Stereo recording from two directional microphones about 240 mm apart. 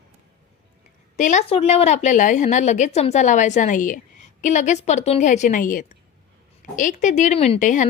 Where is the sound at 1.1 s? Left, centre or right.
Left.